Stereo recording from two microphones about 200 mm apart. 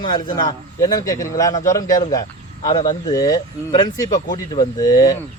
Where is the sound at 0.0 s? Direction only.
20° left (ahead or behind).